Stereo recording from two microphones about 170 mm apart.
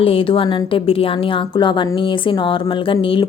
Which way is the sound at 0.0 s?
30° left (ahead or behind).